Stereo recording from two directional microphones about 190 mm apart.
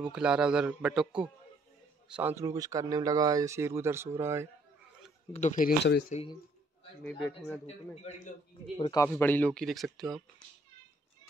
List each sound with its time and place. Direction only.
0.0 s a man's voice: 5° right (ahead or behind)
5.3 s a man's voice: 40° left (ahead or behind)
5.9 s speech: 60° left (ahead or behind)
7.1 s a man's voice: 10° left (ahead or behind)
7.6 s a man's voice: 35° left (ahead or behind)
8.9 s a man's voice: 15° left (ahead or behind)